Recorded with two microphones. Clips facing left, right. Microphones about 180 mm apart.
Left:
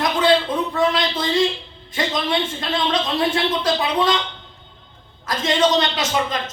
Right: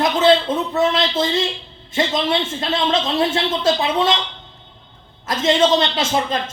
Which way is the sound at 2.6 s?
25° right (ahead or behind).